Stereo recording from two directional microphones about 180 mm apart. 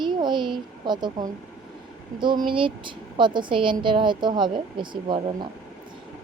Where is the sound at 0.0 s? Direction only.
25° right (ahead or behind).